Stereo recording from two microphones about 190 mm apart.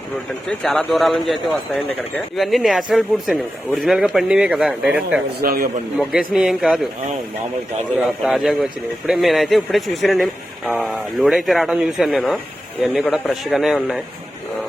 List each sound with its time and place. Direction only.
0.6 s a man's voice: 5° left (ahead or behind)
5.4 s a man's voice: 50° right (ahead or behind)
6.0 s a man's voice: 5° right (ahead or behind)
7.9 s a man's voice: 5° right (ahead or behind)